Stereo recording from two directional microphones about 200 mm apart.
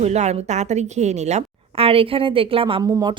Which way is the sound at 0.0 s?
35° right (ahead or behind).